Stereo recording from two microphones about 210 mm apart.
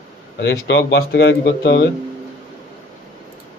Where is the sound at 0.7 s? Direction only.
55° left (ahead or behind).